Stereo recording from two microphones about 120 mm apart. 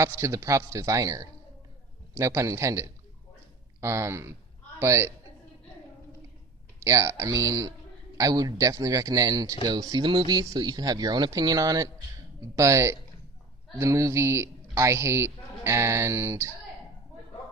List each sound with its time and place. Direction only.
0.2 s a man's voice: 25° right (ahead or behind)
6.8 s a man's voice: 25° right (ahead or behind)